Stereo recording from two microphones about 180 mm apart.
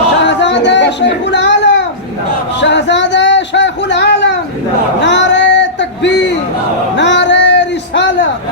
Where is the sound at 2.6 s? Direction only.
80° left.